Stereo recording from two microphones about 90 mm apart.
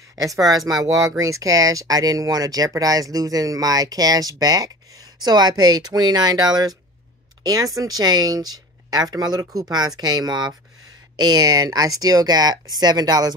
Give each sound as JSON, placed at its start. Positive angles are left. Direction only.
{"t": 0.1, "sound": "speech", "side_deg": -40}